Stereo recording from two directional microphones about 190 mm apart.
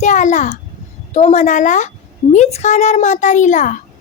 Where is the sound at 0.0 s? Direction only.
40° left (ahead or behind).